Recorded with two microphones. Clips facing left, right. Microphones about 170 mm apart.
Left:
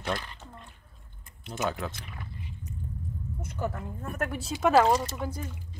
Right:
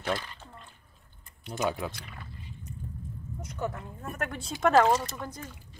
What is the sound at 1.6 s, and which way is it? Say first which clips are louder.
Speech: right 1 dB; 15° right (ahead or behind).